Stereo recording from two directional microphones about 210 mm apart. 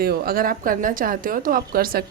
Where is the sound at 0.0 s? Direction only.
45° right (ahead or behind).